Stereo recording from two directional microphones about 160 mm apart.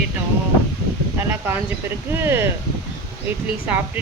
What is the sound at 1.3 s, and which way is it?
Speech, 15° right (ahead or behind).